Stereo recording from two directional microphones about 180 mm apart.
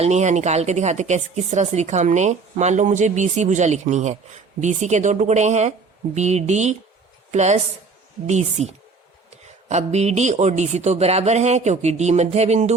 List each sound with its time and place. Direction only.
0.0 s a woman's voice: 40° right (ahead or behind)